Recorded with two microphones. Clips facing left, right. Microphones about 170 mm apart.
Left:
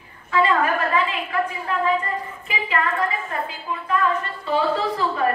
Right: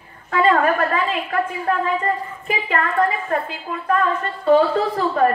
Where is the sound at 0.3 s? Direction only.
50° right (ahead or behind).